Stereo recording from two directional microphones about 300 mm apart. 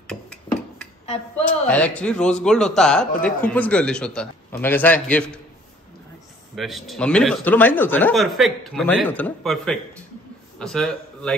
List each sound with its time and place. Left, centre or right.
0.1 s a sound: centre
1.7 s a man's voice: centre
6.5 s a man's voice: centre